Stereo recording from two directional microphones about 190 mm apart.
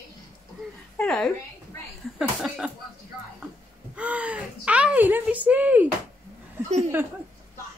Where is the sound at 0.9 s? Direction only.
5° left (ahead or behind).